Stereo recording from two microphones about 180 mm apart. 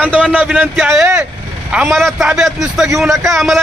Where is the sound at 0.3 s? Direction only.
5° right (ahead or behind).